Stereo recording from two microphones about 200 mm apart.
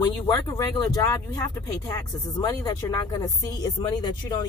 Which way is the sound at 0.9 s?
15° left (ahead or behind).